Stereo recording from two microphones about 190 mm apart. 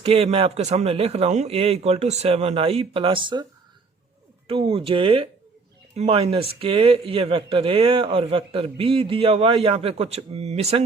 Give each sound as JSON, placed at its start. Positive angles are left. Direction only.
{"t": 0.0, "sound": "speech", "side_deg": -30}
{"t": 4.4, "sound": "speech", "side_deg": -30}